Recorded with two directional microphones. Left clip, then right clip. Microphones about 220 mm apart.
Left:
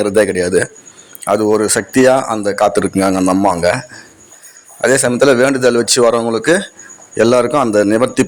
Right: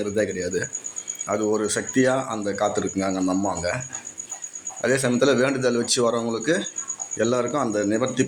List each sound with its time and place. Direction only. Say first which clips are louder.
0.0 s speech: left 12 dB; 40° left (ahead or behind)
4.8 s a man's voice: left 10 dB; 40° left (ahead or behind)